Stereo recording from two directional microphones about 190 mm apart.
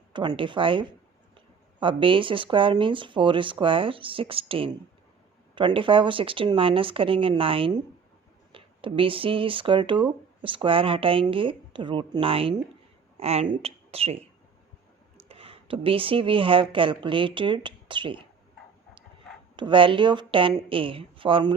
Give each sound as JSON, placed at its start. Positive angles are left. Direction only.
{"t": 0.1, "sound": "speech", "side_deg": -25}
{"t": 15.3, "sound": "speech", "side_deg": -30}
{"t": 19.5, "sound": "speech", "side_deg": -25}